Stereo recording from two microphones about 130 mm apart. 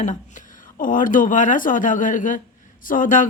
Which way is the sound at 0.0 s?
75° left (ahead or behind).